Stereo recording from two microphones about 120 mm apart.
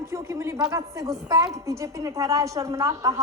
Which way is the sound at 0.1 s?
25° right (ahead or behind).